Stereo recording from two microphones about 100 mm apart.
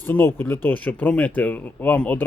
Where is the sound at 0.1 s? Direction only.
20° left (ahead or behind).